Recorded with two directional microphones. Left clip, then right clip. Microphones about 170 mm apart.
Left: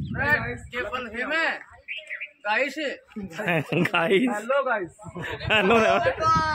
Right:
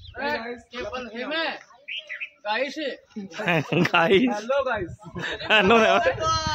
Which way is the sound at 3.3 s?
10° right (ahead or behind).